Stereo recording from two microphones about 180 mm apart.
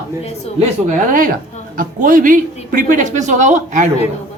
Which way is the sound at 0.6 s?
45° right (ahead or behind).